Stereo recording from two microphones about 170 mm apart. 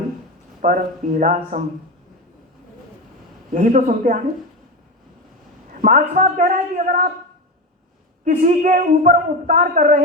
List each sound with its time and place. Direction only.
0.6 s a woman's voice: 45° right (ahead or behind)
3.5 s a woman's voice: 50° right (ahead or behind)
5.8 s a woman's voice: 50° right (ahead or behind)
8.2 s a woman's voice: 45° right (ahead or behind)